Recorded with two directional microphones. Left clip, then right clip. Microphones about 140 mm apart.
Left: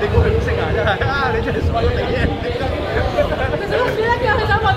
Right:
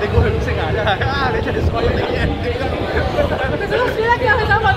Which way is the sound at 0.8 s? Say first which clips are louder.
Right 1 dB; 90° right.